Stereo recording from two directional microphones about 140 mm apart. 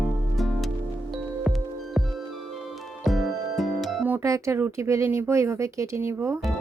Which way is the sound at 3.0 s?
Centre (ahead or behind).